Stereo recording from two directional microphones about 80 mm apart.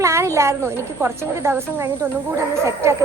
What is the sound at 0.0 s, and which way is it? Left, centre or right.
A woman's voice, right.